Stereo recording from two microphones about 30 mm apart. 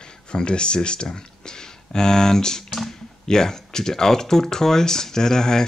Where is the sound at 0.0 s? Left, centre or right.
Left.